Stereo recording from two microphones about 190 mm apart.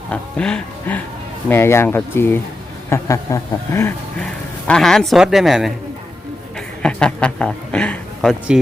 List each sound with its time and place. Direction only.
0.1 s speech: 5° left (ahead or behind)
4.2 s speech: 5° left (ahead or behind)
6.8 s speech: 5° left (ahead or behind)